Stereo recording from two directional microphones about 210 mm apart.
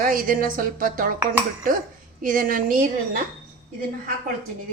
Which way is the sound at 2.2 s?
40° right (ahead or behind).